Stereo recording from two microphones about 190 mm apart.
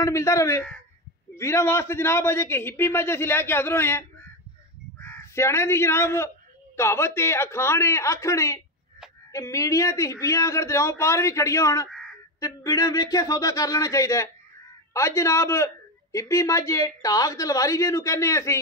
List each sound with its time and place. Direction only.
0.0 s a man's voice: 15° left (ahead or behind)
5.0 s a man's voice: 15° left (ahead or behind)